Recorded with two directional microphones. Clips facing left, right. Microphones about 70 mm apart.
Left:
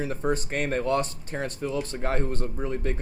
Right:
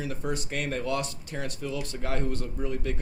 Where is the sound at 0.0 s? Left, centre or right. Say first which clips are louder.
Left 5 dB; left.